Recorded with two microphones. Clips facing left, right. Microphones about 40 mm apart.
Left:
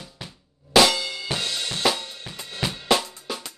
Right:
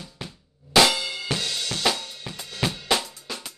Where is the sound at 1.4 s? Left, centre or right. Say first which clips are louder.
Left 2 dB; left.